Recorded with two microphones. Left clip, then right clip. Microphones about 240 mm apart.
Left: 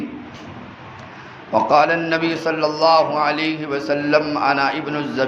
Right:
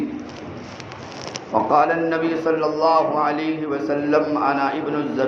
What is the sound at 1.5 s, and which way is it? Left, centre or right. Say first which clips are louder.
A man's voice: left 2 dB; left.